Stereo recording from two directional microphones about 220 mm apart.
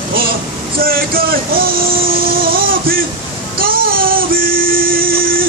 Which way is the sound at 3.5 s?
40° right (ahead or behind).